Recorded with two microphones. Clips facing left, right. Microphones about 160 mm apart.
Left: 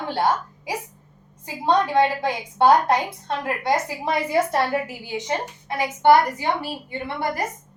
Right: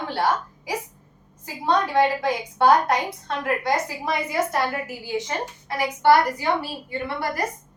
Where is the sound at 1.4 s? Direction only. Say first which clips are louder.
Left 2 dB; 20° left (ahead or behind).